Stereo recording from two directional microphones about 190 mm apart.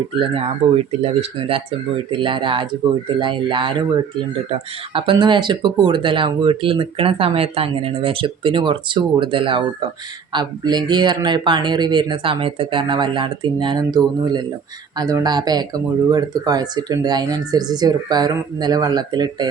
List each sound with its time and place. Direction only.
0.1 s speech: 30° right (ahead or behind)